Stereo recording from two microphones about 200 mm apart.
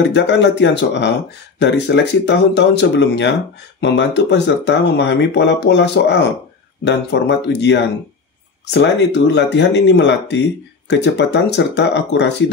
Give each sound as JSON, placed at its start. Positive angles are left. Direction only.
{"t": 0.0, "sound": "speech", "side_deg": 60}